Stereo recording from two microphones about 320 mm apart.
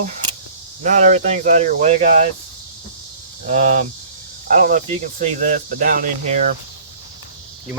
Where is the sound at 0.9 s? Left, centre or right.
Right.